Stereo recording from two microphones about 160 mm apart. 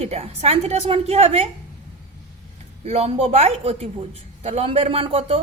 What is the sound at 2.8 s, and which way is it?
A woman's voice, 40° right (ahead or behind).